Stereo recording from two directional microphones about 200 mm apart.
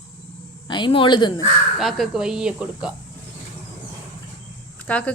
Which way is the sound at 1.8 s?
Centre (ahead or behind).